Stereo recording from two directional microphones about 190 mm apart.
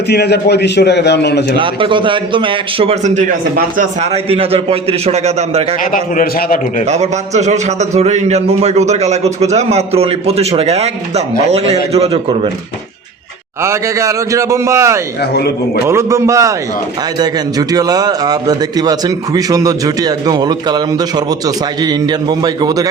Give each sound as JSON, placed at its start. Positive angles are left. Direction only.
{"t": 0.1, "sound": "a man's voice", "side_deg": 60}
{"t": 1.5, "sound": "a man's voice", "side_deg": -25}
{"t": 5.8, "sound": "a man's voice", "side_deg": 45}
{"t": 6.8, "sound": "a man's voice", "side_deg": -35}
{"t": 13.6, "sound": "a man's voice", "side_deg": -15}
{"t": 15.2, "sound": "a man's voice", "side_deg": 60}
{"t": 15.9, "sound": "a man's voice", "side_deg": -15}